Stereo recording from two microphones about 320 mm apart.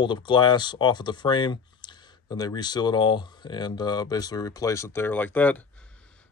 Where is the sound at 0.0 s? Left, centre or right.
Centre.